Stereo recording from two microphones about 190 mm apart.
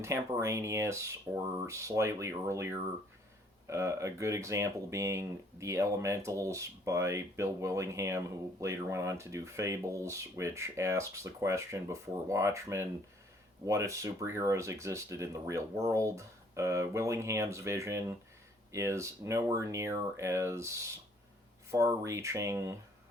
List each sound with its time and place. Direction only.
0.0 s speech: 15° right (ahead or behind)